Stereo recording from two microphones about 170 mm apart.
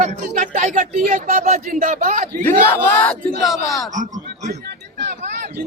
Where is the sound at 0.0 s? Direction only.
50° right (ahead or behind).